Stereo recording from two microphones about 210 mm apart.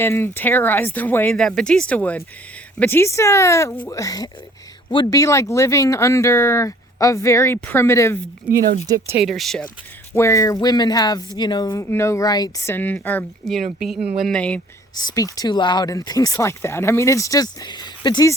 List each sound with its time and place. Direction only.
0.0 s speech: 10° left (ahead or behind)
9.2 s speech: centre (ahead or behind)
10.2 s speech: 15° left (ahead or behind)
14.9 s speech: 20° left (ahead or behind)